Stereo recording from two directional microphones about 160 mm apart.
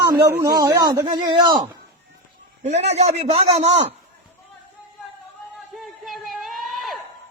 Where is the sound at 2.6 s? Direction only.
45° right (ahead or behind).